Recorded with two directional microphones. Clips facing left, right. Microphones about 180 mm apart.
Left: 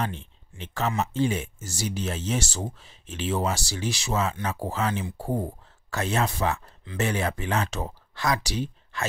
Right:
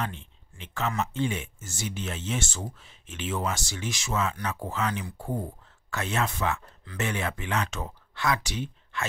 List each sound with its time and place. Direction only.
0.6 s speech: 35° left (ahead or behind)